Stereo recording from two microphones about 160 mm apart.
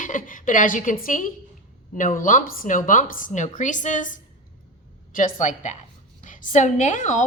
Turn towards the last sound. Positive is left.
turn(degrees=50)  # may be behind; listen again after turning